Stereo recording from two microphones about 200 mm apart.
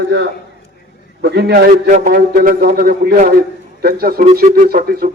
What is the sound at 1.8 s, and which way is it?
Speech, 40° right (ahead or behind).